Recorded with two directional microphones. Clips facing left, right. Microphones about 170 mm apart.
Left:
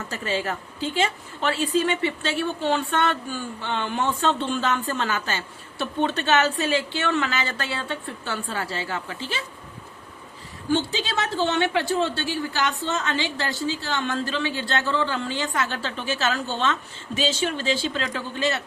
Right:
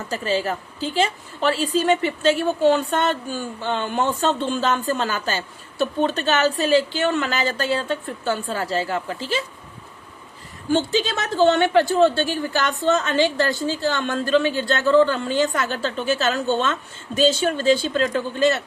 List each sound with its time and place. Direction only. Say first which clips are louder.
0.1 s speech: right 5 dB; 35° right (ahead or behind)
10.7 s a woman's voice: right 4 dB; 45° right (ahead or behind)